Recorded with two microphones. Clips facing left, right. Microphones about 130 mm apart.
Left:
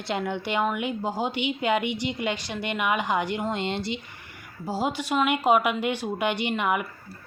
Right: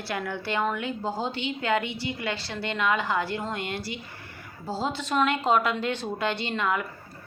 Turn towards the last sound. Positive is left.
turn(degrees=15)  # may be behind; listen again after turning